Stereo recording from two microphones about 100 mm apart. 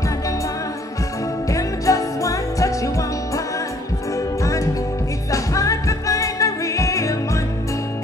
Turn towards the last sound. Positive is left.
turn(degrees=35)  # may be behind; listen again after turning